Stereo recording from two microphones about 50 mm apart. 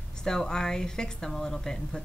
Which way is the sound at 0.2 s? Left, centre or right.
Centre.